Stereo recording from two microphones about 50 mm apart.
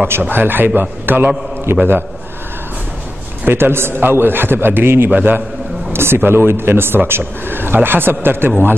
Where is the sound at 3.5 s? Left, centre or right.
Right.